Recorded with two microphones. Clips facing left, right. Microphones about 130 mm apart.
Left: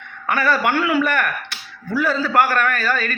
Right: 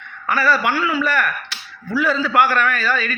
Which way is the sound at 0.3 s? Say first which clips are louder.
Even; 55° left (ahead or behind).